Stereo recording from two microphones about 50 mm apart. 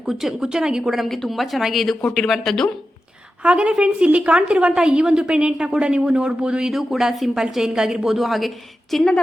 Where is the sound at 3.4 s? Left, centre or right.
Right.